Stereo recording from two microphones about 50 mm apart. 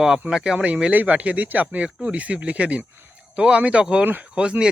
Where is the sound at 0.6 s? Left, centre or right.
Right.